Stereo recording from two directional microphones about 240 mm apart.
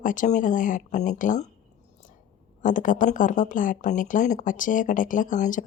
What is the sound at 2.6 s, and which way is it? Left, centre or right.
Speech, left.